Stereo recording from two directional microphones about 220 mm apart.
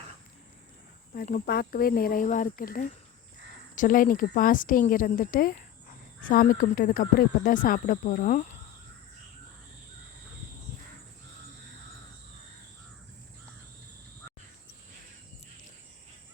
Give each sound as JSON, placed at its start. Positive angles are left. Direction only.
{"t": 1.1, "sound": "speech", "side_deg": 40}